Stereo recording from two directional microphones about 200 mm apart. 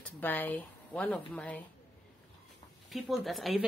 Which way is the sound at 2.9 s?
Centre (ahead or behind).